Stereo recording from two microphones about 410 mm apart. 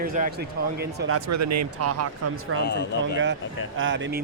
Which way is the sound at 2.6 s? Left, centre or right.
Left.